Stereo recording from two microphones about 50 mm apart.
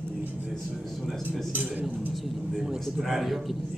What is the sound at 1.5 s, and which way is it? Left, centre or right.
Speech, right.